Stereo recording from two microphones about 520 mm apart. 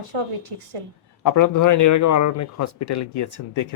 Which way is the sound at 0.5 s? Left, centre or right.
Right.